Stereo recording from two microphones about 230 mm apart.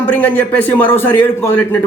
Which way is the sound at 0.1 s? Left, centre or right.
Centre.